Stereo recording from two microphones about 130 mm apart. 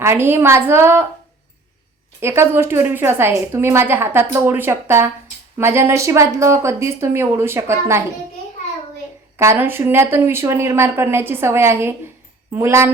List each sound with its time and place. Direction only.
0.0 s speech: 20° right (ahead or behind)
2.2 s a woman's voice: 20° right (ahead or behind)
9.4 s speech: 20° right (ahead or behind)